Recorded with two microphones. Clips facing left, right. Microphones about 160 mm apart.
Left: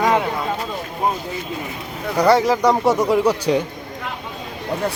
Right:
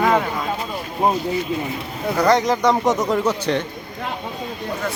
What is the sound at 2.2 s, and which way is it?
Speech, 10° left (ahead or behind).